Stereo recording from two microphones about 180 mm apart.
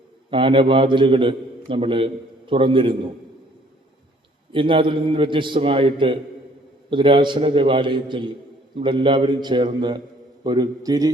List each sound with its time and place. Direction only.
0.3 s a man's voice: 30° right (ahead or behind)
4.5 s a man's voice: 30° right (ahead or behind)